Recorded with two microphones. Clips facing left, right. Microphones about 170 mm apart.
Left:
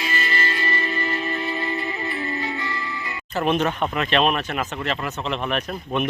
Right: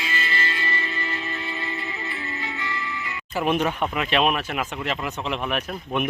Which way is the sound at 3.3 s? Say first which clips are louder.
Left 1 dB; 10° right (ahead or behind).